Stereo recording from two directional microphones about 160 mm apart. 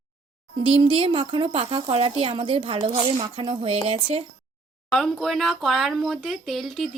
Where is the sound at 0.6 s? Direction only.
35° right (ahead or behind).